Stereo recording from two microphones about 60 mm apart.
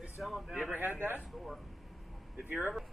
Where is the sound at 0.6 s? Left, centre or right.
Right.